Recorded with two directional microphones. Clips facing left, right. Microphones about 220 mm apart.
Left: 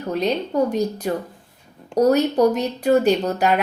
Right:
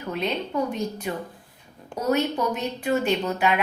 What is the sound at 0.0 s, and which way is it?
A woman's voice, 40° left (ahead or behind).